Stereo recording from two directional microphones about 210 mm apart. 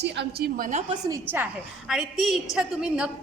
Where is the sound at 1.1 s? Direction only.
10° right (ahead or behind).